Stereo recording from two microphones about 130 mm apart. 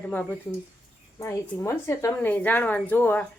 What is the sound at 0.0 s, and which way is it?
A woman's voice, 10° left (ahead or behind).